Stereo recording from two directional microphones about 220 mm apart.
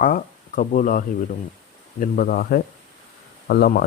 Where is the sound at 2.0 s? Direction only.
40° left (ahead or behind).